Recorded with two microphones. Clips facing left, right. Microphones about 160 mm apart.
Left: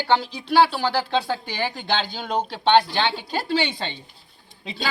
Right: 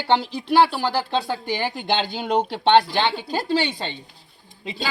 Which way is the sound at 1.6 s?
15° right (ahead or behind).